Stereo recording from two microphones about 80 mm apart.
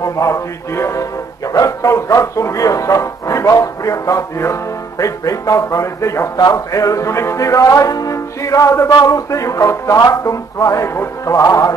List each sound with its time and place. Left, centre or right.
0.0 s speech: left
6.3 s music: left